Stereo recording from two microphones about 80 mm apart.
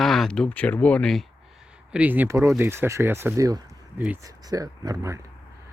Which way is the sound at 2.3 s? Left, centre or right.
Right.